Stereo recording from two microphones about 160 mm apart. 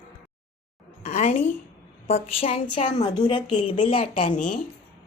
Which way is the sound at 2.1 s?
40° left (ahead or behind).